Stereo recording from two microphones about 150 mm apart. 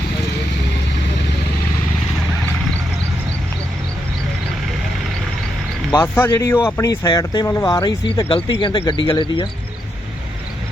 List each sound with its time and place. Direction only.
5.9 s speech: 15° left (ahead or behind)
8.0 s speech: 35° left (ahead or behind)